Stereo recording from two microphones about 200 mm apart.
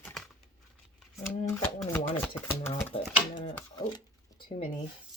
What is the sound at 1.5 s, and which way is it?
Shuffling cards, 10° left (ahead or behind).